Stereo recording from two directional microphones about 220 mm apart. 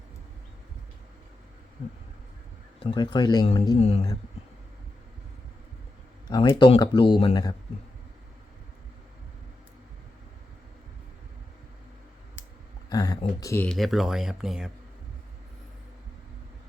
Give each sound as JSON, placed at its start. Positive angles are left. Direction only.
{"t": 2.8, "sound": "speech", "side_deg": 20}
{"t": 6.3, "sound": "speech", "side_deg": 20}
{"t": 12.9, "sound": "a sound", "side_deg": 15}
{"t": 13.4, "sound": "speech", "side_deg": 10}